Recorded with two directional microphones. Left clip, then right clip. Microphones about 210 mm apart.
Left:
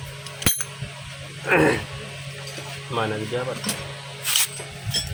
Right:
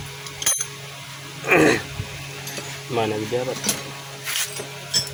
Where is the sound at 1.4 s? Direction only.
15° right (ahead or behind).